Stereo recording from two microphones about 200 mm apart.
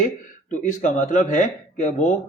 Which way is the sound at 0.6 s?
40° left (ahead or behind).